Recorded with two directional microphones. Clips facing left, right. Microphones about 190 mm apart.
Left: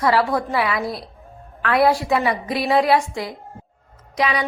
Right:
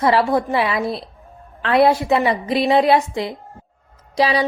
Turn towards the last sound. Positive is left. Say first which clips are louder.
# right 4 dB
turn(degrees=-30)  # may be behind; listen again after turning